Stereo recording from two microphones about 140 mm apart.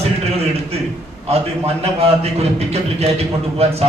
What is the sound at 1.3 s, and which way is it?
A man's voice, 45° right (ahead or behind).